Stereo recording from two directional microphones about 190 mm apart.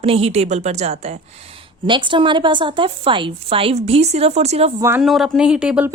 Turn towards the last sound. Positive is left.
turn(degrees=-5)  # may be behind; listen again after turning